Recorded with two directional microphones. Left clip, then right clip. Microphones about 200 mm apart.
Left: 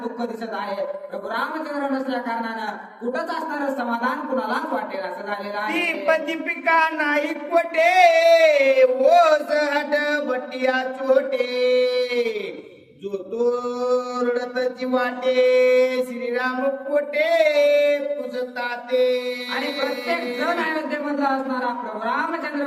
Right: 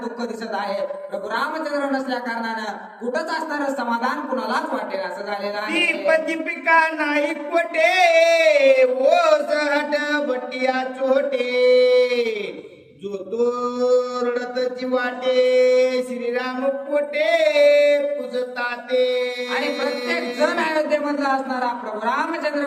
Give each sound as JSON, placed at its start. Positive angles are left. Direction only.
{"t": 3.8, "sound": "a woman's voice", "side_deg": -15}
{"t": 5.6, "sound": "speech", "side_deg": 15}
{"t": 13.3, "sound": "speech", "side_deg": 15}
{"t": 20.1, "sound": "a woman's voice", "side_deg": -15}